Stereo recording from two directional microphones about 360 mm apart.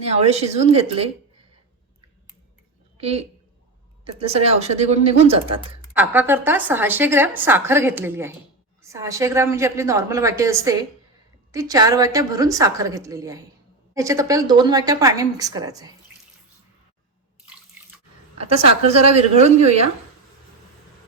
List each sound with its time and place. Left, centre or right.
0.2 s a woman's voice: centre
3.0 s a woman's voice: centre
5.9 s a woman's voice: centre
18.3 s a woman's voice: centre